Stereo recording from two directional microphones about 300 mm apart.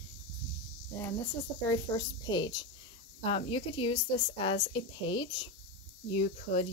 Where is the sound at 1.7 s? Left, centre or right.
Centre.